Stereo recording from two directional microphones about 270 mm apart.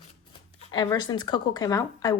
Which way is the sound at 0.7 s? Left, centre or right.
Centre.